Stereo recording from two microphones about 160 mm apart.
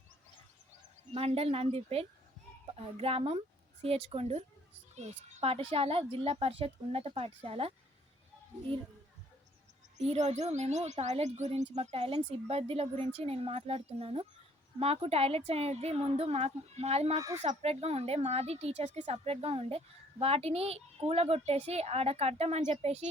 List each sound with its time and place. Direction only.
1.1 s speech: 40° right (ahead or behind)
10.0 s speech: 45° right (ahead or behind)
17.2 s speech: 20° right (ahead or behind)
17.4 s speech: 40° right (ahead or behind)